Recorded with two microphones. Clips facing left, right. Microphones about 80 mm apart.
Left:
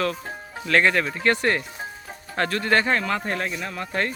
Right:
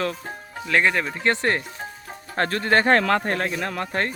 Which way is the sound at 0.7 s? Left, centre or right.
Centre.